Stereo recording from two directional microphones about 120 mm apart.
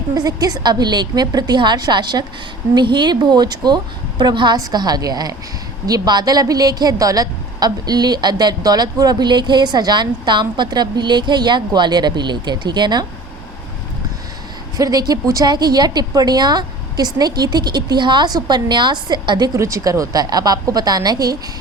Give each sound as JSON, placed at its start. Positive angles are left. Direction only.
{"t": 0.1, "sound": "a woman's voice", "side_deg": -30}
{"t": 14.8, "sound": "a woman's voice", "side_deg": -30}
{"t": 19.5, "sound": "a woman's voice", "side_deg": -25}